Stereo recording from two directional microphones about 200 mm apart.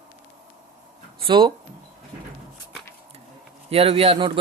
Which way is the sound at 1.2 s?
25° right (ahead or behind).